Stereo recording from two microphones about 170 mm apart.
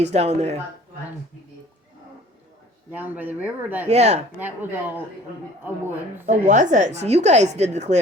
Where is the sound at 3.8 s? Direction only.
40° right (ahead or behind).